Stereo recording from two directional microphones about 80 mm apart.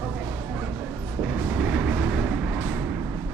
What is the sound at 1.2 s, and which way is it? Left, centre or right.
Vehicle, right.